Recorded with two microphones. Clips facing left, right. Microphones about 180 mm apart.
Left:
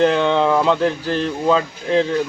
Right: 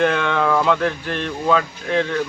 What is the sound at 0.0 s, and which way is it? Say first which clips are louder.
Speech: left 3 dB; 30° left (ahead or behind).